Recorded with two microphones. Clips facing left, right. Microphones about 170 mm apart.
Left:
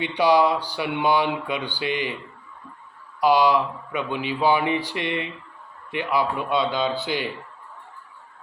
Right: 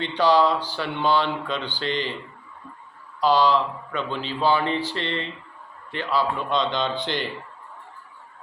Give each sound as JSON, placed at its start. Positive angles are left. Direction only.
{"t": 0.0, "sound": "speech", "side_deg": 10}
{"t": 3.2, "sound": "speech", "side_deg": 10}